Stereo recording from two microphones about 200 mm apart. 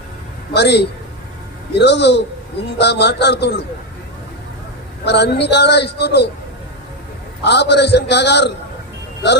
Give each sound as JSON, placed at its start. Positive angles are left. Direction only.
{"t": 0.5, "sound": "speech", "side_deg": 55}
{"t": 5.0, "sound": "speech", "side_deg": 55}
{"t": 7.4, "sound": "speech", "side_deg": 55}